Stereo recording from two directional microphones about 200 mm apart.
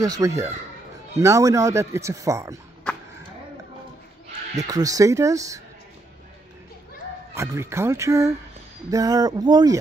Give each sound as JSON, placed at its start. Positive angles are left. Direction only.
{"t": 0.0, "sound": "speech", "side_deg": -15}
{"t": 2.9, "sound": "a sound", "side_deg": 5}
{"t": 4.6, "sound": "speech", "side_deg": -20}
{"t": 7.3, "sound": "speech", "side_deg": -15}